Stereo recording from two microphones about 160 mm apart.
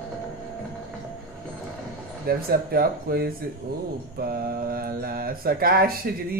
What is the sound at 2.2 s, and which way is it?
Speech, 70° right (ahead or behind).